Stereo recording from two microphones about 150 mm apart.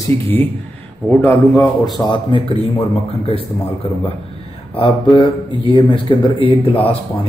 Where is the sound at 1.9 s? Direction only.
30° left (ahead or behind).